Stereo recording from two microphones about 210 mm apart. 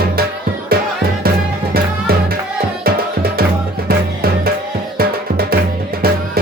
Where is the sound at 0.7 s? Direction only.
45° right (ahead or behind).